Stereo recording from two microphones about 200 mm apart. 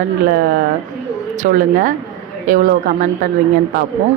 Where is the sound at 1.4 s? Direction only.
45° right (ahead or behind).